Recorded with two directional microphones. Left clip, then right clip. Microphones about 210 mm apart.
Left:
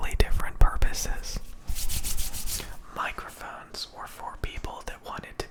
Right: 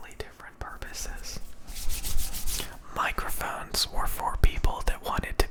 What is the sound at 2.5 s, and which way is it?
Whispering, 15° right (ahead or behind).